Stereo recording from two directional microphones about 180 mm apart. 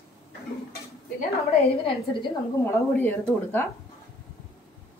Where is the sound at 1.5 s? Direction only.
35° left (ahead or behind).